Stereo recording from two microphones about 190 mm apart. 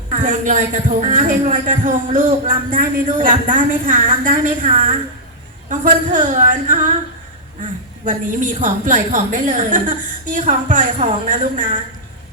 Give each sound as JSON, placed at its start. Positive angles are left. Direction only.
{"t": 0.1, "sound": "a woman's voice", "side_deg": -40}
{"t": 8.0, "sound": "a woman's voice", "side_deg": -45}